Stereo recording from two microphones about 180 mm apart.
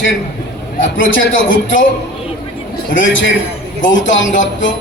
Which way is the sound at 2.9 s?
90° left.